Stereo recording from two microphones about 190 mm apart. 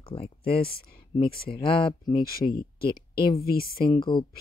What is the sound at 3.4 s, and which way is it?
Speech, 50° left (ahead or behind).